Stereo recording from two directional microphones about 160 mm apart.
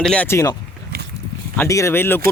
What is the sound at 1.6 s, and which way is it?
Speech, 20° left (ahead or behind).